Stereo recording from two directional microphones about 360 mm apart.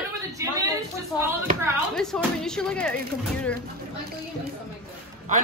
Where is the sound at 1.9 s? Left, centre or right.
Centre.